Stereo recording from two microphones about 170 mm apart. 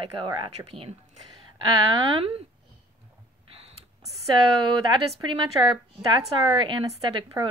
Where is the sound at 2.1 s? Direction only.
35° right (ahead or behind).